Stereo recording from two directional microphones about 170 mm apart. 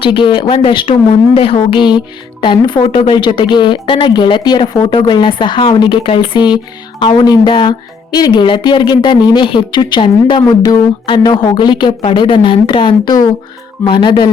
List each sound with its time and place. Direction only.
0.0 s a woman's voice: 30° left (ahead or behind)